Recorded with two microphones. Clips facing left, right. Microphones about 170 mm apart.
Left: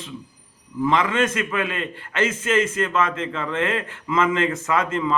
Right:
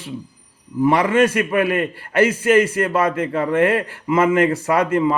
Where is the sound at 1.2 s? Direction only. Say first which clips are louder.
Right 6 dB; 35° right (ahead or behind).